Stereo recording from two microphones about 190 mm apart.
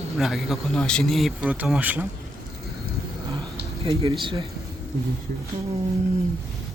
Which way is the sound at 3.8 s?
30° right (ahead or behind).